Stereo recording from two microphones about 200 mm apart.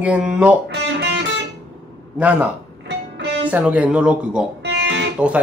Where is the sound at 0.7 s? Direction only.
60° right (ahead or behind).